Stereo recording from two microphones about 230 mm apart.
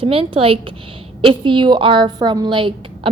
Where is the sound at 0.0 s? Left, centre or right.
Right.